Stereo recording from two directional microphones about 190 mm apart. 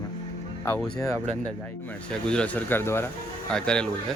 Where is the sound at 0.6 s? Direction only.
15° left (ahead or behind).